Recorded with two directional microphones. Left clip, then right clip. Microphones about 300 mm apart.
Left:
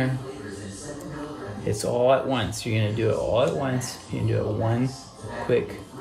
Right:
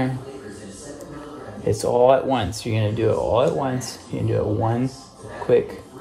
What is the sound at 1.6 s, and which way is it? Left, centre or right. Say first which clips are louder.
Speech: right 5 dB; centre.